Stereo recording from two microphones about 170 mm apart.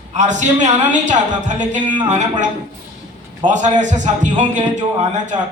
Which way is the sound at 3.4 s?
45° right (ahead or behind).